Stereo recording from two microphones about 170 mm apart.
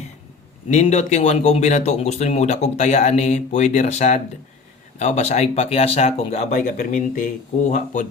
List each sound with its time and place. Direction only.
0.7 s speech: 40° left (ahead or behind)